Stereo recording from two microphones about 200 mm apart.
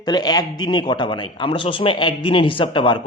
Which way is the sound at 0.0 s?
20° left (ahead or behind).